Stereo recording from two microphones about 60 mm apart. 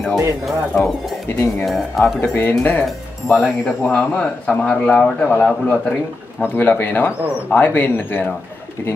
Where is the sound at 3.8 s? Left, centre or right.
Centre.